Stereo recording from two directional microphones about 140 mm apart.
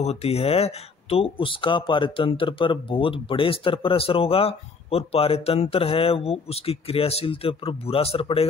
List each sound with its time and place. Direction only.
0.0 s speech: 50° left (ahead or behind)